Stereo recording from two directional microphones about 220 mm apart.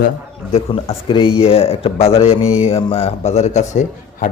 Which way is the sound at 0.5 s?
30° left (ahead or behind).